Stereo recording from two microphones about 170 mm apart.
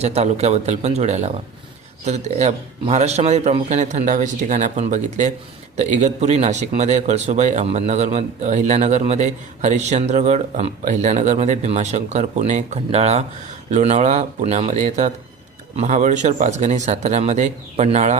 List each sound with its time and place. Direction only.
0.0 s speech: 40° right (ahead or behind)